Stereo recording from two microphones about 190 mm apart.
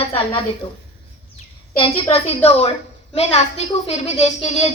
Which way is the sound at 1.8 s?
30° left (ahead or behind).